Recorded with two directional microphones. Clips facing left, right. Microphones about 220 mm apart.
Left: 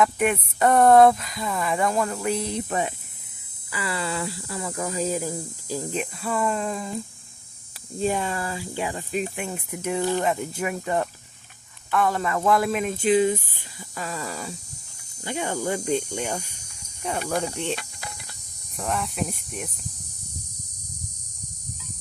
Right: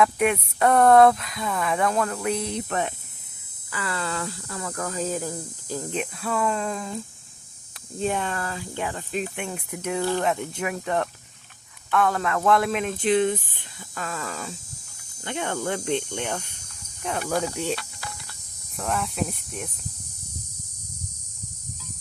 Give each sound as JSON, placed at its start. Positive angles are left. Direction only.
{"t": 0.0, "sound": "speech", "side_deg": 0}
{"t": 10.0, "sound": "speech", "side_deg": 15}
{"t": 10.2, "sound": "speech", "side_deg": 5}
{"t": 17.2, "sound": "speech", "side_deg": -5}
{"t": 18.8, "sound": "speech", "side_deg": 0}